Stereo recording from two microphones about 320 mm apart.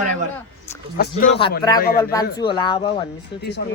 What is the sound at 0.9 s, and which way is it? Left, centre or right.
Speech, left.